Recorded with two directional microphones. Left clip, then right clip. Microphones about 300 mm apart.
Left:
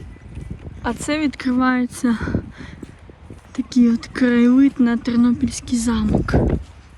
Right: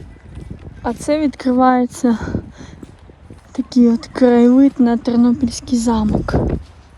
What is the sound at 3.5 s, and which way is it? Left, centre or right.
Speech, centre.